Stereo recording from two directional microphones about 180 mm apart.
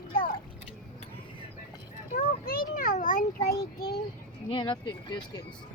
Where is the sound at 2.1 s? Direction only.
55° left (ahead or behind).